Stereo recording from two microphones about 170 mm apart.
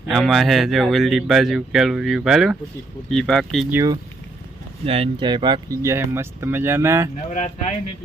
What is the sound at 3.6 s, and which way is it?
Speech, 15° right (ahead or behind).